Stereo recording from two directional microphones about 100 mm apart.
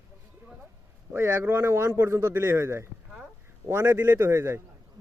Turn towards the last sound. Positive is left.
turn(degrees=-25)  # may be behind; listen again after turning